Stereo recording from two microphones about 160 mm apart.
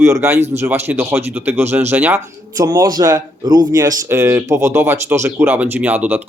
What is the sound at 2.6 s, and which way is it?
Speech, 25° right (ahead or behind).